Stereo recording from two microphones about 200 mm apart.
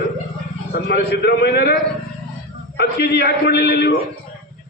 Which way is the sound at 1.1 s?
55° left (ahead or behind).